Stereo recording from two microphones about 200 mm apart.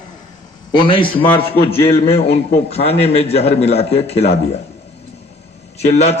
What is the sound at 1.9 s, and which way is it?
A man's voice, 30° left (ahead or behind).